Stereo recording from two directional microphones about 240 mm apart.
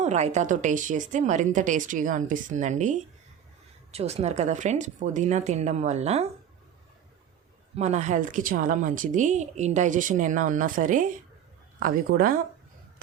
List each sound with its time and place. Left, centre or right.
0.0 s a woman's voice: right
7.8 s speech: right